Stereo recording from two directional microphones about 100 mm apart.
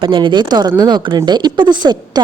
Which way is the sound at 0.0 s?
55° right (ahead or behind).